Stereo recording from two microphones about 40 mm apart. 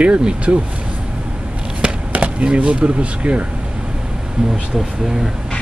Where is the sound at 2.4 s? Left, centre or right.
Right.